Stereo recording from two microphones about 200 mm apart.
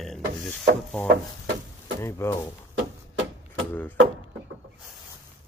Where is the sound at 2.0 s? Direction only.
15° left (ahead or behind).